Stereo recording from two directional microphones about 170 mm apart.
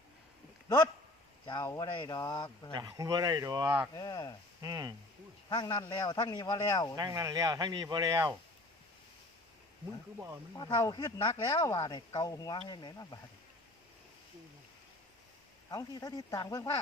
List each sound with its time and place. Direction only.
1.5 s speech: 20° left (ahead or behind)
2.7 s speech: 20° right (ahead or behind)
3.9 s speech: 25° left (ahead or behind)
4.6 s speech: 20° right (ahead or behind)
5.5 s speech: 25° left (ahead or behind)
6.9 s speech: 20° right (ahead or behind)
10.2 s speech: 15° right (ahead or behind)
10.5 s speech: 20° left (ahead or behind)
15.7 s speech: 20° left (ahead or behind)